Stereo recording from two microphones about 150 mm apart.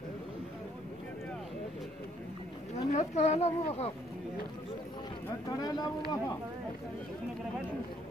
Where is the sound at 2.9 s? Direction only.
50° left (ahead or behind).